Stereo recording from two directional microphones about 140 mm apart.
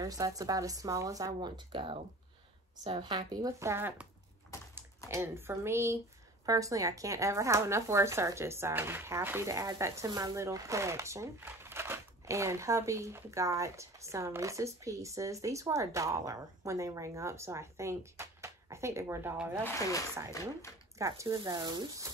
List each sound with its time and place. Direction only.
0.0 s speech: 25° right (ahead or behind)
1.7 s speech: 40° right (ahead or behind); by 19.3 s 20° right (ahead or behind)
19.6 s speech: 20° left (ahead or behind)
21.0 s speech: 20° right (ahead or behind)